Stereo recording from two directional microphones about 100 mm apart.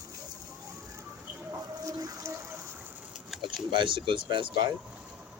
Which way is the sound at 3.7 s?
55° right (ahead or behind).